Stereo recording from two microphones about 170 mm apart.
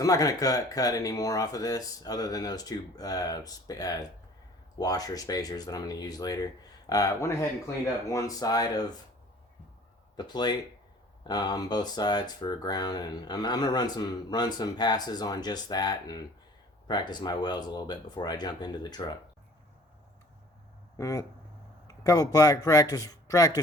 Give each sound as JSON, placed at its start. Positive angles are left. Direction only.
{"t": 0.0, "sound": "speech", "side_deg": 20}
{"t": 10.2, "sound": "speech", "side_deg": 25}
{"t": 20.9, "sound": "speech", "side_deg": 20}